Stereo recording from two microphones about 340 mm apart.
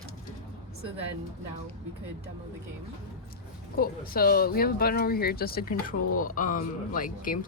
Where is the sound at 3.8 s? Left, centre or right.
Left.